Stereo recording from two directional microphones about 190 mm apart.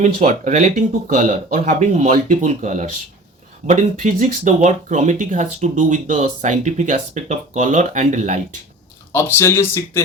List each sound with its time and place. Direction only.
0.0 s speech: 40° right (ahead or behind)
9.1 s speech: 15° left (ahead or behind)